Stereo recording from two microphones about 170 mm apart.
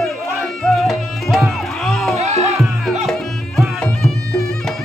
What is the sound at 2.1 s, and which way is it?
Music, 40° right (ahead or behind).